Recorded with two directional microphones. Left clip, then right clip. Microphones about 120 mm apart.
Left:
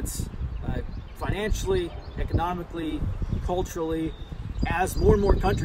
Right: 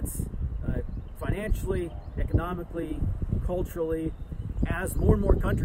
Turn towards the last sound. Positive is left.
turn(degrees=-40)  # may be behind; listen again after turning